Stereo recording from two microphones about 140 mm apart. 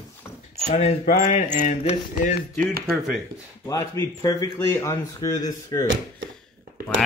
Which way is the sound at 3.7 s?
25° left (ahead or behind).